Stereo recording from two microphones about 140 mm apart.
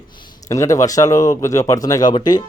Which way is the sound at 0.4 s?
25° left (ahead or behind).